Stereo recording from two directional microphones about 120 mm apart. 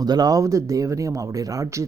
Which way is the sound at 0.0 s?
35° right (ahead or behind).